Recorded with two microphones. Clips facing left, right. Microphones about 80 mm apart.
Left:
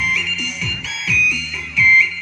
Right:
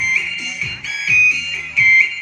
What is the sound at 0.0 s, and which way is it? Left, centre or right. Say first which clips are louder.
Music: even; left.